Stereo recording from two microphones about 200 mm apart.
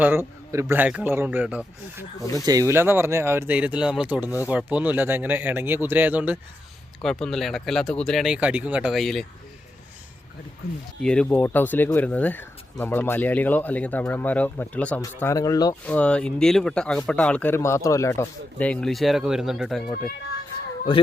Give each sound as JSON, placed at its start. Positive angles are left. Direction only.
{"t": 0.0, "sound": "a man's voice", "side_deg": -10}
{"t": 2.4, "sound": "a man's voice", "side_deg": -20}
{"t": 7.0, "sound": "speech", "side_deg": 5}
{"t": 11.0, "sound": "speech", "side_deg": 5}
{"t": 15.9, "sound": "speech", "side_deg": 5}
{"t": 20.9, "sound": "speech", "side_deg": 25}